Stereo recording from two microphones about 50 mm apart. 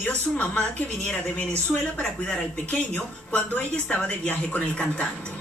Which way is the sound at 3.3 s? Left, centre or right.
Left.